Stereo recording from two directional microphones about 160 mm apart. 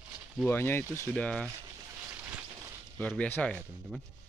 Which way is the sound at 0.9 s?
20° right (ahead or behind).